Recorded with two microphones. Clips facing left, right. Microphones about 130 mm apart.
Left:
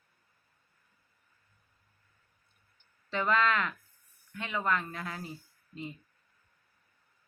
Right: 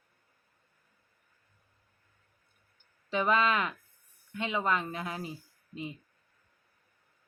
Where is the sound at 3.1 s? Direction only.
15° right (ahead or behind).